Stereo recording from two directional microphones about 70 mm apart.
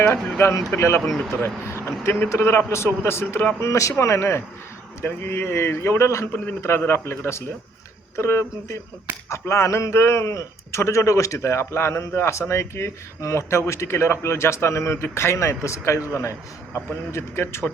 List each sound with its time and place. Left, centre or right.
0.0 s a man's voice: left
3.6 s a man's voice: left
6.3 s a man's voice: left